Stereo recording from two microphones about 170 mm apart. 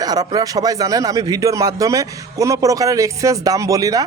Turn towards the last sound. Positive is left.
turn(degrees=-20)  # may be behind; listen again after turning